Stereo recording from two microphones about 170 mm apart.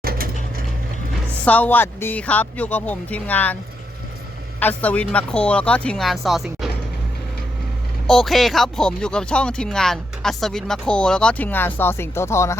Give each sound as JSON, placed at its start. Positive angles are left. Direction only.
{"t": 0.0, "sound": "a sound", "side_deg": -60}
{"t": 1.5, "sound": "speech", "side_deg": 10}
{"t": 4.6, "sound": "speech", "side_deg": 10}
{"t": 8.0, "sound": "speech", "side_deg": 0}